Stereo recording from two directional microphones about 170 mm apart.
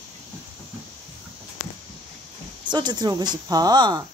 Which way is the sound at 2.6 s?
25° right (ahead or behind).